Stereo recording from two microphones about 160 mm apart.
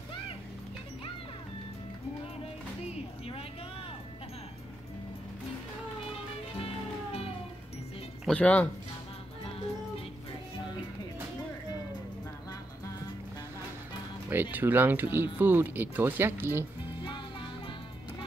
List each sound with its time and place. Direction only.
2.9 s a sound: 40° left (ahead or behind)
6.6 s music: 35° left (ahead or behind)
8.3 s speech: 10° left (ahead or behind)
14.3 s speech: 10° right (ahead or behind)